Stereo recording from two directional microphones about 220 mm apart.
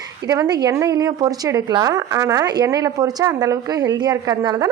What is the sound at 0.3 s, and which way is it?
Speech, 15° right (ahead or behind).